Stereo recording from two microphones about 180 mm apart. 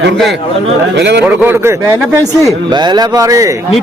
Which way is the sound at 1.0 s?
70° right (ahead or behind).